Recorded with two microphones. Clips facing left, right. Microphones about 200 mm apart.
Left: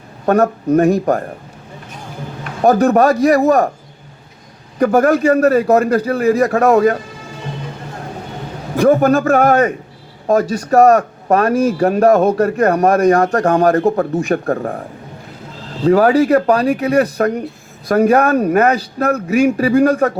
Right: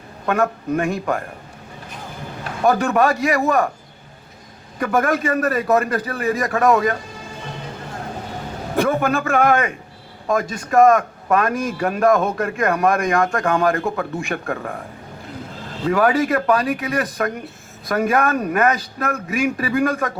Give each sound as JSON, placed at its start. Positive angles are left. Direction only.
{"t": 0.3, "sound": "a man's voice", "side_deg": 40}
{"t": 2.6, "sound": "a man's voice", "side_deg": 40}
{"t": 4.8, "sound": "a man's voice", "side_deg": 35}
{"t": 8.8, "sound": "a man's voice", "side_deg": 40}
{"t": 15.8, "sound": "a man's voice", "side_deg": 35}